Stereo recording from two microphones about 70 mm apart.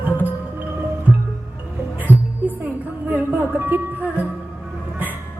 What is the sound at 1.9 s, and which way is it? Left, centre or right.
Music, right.